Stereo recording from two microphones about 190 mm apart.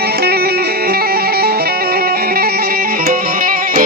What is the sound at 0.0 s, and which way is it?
Music, 55° right (ahead or behind).